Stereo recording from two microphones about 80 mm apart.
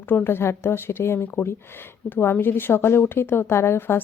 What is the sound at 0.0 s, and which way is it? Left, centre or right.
A woman's voice, left.